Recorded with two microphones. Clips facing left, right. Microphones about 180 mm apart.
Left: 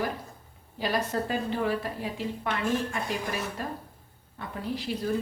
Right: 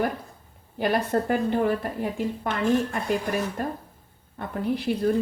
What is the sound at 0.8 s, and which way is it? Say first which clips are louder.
A woman's voice: right 5 dB; 55° right (ahead or behind).